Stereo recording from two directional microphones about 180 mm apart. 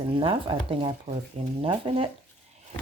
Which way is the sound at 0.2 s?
30° right (ahead or behind).